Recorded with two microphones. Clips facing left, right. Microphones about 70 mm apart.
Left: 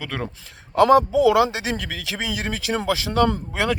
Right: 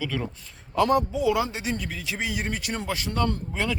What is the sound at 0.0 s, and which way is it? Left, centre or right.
Speech, left.